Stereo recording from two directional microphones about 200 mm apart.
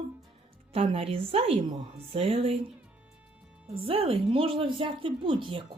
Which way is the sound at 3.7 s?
30° right (ahead or behind).